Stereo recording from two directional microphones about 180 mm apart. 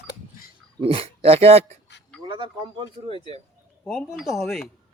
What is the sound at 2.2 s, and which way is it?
Speech, 25° right (ahead or behind).